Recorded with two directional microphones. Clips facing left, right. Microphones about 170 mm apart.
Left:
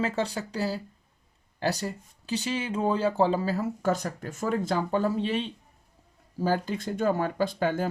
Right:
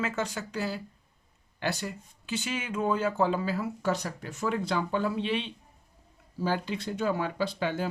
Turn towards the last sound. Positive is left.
turn(degrees=45)  # may be behind; listen again after turning